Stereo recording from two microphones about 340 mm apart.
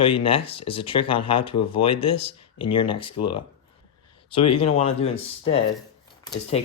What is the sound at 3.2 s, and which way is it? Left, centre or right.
Speech, left.